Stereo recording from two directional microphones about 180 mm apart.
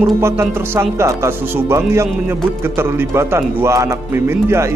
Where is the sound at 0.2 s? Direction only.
15° right (ahead or behind).